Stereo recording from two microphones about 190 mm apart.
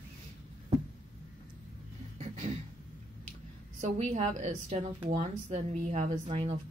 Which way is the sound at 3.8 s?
35° right (ahead or behind).